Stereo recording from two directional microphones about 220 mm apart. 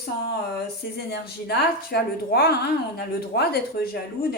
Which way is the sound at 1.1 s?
45° left (ahead or behind).